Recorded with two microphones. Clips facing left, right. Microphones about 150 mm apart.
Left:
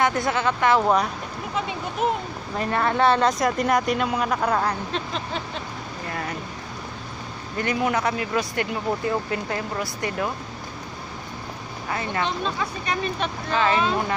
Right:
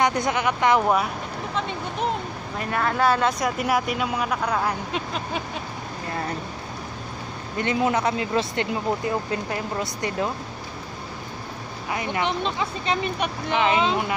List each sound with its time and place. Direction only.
0.0 s speech: 20° right (ahead or behind)
1.5 s speech: 5° left (ahead or behind); by 5.4 s 10° right (ahead or behind)
7.5 s speech: 20° right (ahead or behind)
11.9 s speech: 15° right (ahead or behind)